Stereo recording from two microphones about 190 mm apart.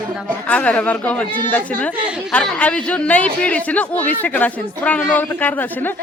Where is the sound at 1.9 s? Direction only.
5° right (ahead or behind).